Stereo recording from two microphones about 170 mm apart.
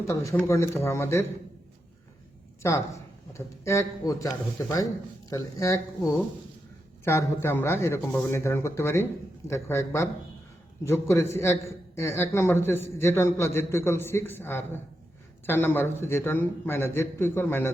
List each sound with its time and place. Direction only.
0.1 s a man's voice: 20° left (ahead or behind)
2.6 s a man's voice: 15° left (ahead or behind)